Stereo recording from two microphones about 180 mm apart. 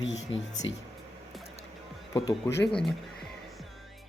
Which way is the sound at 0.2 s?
40° left (ahead or behind).